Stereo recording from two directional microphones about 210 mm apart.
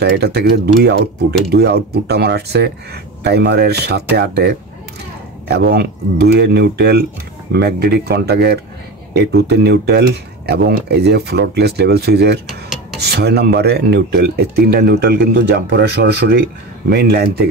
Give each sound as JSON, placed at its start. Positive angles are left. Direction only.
{"t": 0.0, "sound": "speech", "side_deg": -50}